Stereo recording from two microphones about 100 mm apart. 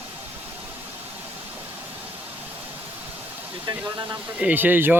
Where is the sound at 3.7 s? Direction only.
45° right (ahead or behind).